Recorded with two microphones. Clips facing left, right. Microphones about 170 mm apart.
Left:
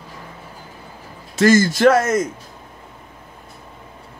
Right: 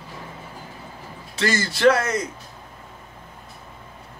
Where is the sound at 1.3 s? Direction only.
45° left (ahead or behind).